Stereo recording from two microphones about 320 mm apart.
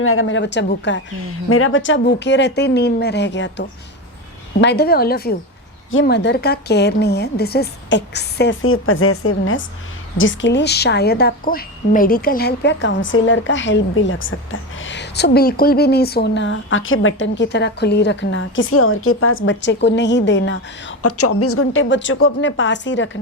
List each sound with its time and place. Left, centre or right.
0.0 s a woman's voice: left